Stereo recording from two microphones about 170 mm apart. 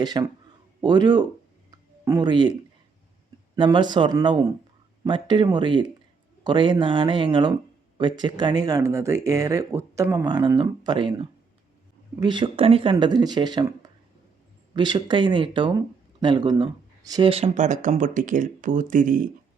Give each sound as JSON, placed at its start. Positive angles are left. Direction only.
{"t": 0.0, "sound": "speech", "side_deg": -25}
{"t": 3.5, "sound": "speech", "side_deg": -25}